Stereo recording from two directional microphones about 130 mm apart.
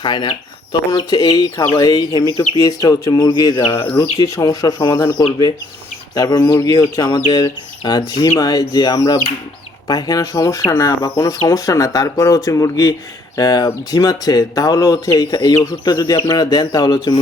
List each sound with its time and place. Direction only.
0.0 s speech: 35° left (ahead or behind)